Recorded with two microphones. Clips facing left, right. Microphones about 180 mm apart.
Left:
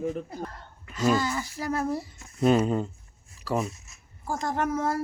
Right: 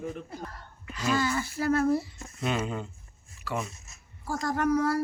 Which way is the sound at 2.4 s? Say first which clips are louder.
Left 8 dB; 40° left (ahead or behind).